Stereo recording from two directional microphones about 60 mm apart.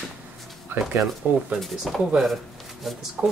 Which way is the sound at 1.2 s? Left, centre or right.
Right.